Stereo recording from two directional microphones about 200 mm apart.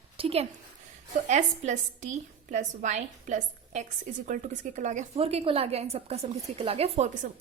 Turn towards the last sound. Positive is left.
turn(degrees=-30)  # may be behind; listen again after turning